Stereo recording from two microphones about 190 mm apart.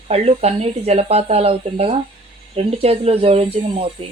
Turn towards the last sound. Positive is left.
turn(degrees=-30)  # may be behind; listen again after turning